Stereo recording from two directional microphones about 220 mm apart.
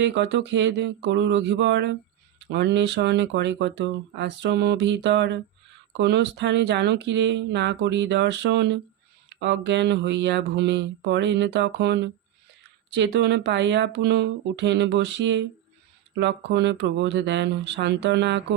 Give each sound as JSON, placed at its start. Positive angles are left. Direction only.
{"t": 0.0, "sound": "speech", "side_deg": -50}